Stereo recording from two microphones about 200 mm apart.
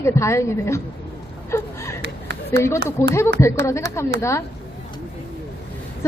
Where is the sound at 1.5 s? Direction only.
15° left (ahead or behind).